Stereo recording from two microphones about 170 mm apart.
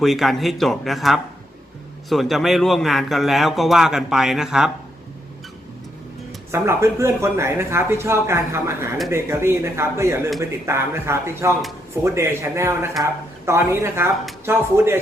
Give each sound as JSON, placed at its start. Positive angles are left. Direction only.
{"t": 0.0, "sound": "a man's voice", "side_deg": 0}
{"t": 6.5, "sound": "speech", "side_deg": -15}